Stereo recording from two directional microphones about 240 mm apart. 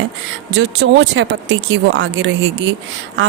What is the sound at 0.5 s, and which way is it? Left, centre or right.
Speech, right.